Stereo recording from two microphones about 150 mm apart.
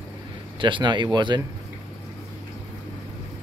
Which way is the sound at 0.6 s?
30° right (ahead or behind).